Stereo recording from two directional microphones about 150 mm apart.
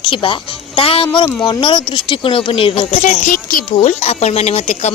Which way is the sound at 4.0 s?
45° left (ahead or behind).